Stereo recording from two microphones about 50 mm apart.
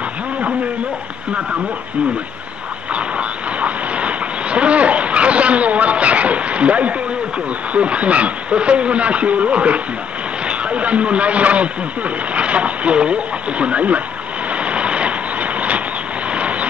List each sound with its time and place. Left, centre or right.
2.9 s vehicle: right
7.7 s a man's voice: right
14.5 s vehicle: right